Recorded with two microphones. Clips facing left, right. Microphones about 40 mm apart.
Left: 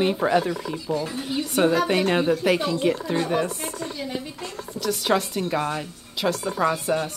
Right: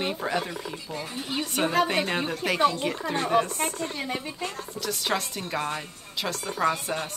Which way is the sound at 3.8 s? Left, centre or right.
Right.